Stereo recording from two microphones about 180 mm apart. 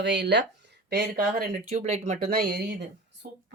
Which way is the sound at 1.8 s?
45° right (ahead or behind).